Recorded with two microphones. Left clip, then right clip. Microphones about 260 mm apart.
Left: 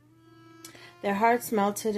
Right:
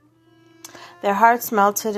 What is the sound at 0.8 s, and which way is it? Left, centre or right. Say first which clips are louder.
A woman's voice: right 9 dB; centre.